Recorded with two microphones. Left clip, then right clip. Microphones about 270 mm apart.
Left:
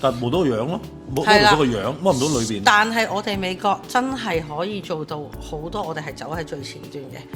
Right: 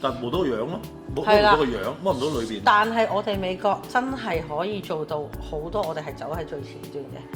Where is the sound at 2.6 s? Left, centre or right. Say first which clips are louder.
Left 2 dB; left.